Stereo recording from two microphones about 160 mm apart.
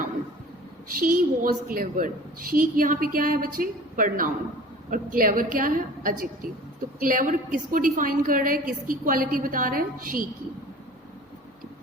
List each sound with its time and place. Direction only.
0.9 s a woman's voice: 60° right (ahead or behind)